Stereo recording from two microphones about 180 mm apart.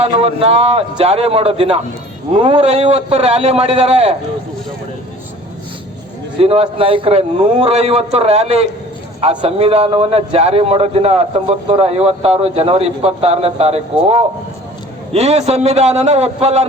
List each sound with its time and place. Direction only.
0.0 s a man's voice: 35° right (ahead or behind)
6.4 s a man's voice: 35° right (ahead or behind)